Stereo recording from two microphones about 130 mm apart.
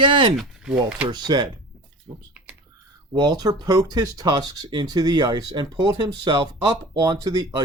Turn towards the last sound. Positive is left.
turn(degrees=-35)  # may be behind; listen again after turning